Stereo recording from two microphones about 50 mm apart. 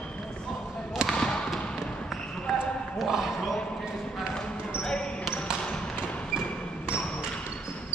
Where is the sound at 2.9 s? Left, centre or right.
Centre.